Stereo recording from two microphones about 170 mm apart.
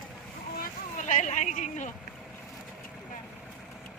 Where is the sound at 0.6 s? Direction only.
45° left (ahead or behind).